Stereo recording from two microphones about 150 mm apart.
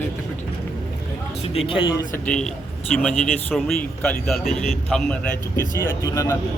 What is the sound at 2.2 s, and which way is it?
Speech, 5° left (ahead or behind).